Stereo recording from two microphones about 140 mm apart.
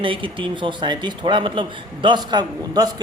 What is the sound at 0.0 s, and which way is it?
Speech, 40° right (ahead or behind).